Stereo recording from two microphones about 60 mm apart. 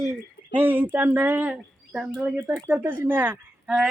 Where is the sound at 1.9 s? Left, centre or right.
Centre.